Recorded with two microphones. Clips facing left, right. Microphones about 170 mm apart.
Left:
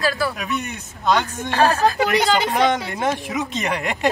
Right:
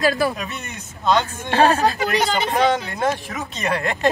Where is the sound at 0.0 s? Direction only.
20° right (ahead or behind).